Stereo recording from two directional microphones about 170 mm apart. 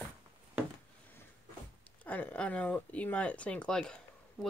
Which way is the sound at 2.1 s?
10° left (ahead or behind).